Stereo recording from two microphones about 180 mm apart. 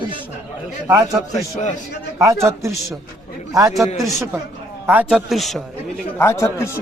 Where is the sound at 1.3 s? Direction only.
40° left (ahead or behind).